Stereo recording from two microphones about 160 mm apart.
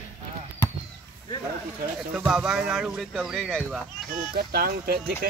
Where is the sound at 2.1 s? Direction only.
5° right (ahead or behind).